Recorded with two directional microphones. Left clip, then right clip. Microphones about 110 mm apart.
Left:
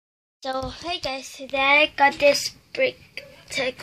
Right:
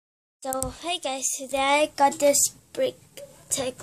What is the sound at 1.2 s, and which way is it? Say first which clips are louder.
Speech: left 4 dB; 50° right (ahead or behind).